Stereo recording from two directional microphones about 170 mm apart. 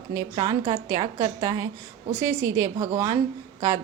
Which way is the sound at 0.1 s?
25° right (ahead or behind).